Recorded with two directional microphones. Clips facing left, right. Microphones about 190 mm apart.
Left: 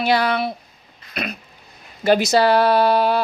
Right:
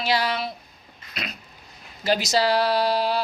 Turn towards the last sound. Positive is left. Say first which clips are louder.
# left 6 dB
turn(degrees=55)  # may be behind; listen again after turning